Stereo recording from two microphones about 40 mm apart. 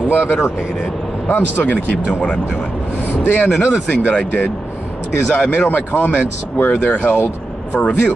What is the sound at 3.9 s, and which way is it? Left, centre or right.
Speech, left.